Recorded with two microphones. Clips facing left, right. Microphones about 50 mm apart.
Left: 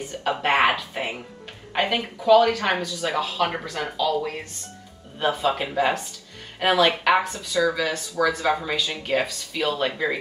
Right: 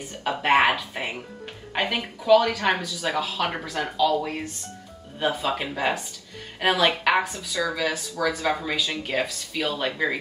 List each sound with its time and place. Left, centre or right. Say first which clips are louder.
0.2 s speech: even; centre